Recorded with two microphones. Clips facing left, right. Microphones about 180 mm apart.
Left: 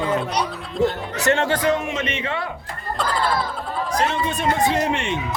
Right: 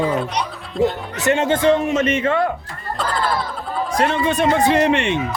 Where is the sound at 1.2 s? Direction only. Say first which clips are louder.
Right 4 dB; 20° right (ahead or behind); by 2.4 s 50° right (ahead or behind).